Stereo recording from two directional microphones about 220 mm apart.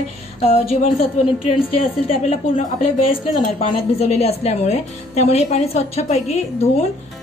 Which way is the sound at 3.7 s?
25° left (ahead or behind).